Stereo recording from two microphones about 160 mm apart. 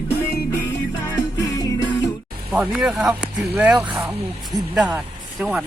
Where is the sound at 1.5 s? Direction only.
25° left (ahead or behind).